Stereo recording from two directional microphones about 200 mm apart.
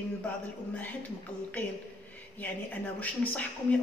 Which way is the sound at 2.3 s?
10° left (ahead or behind).